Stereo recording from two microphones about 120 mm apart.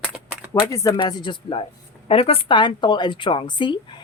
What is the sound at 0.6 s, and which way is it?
Speech, 25° left (ahead or behind).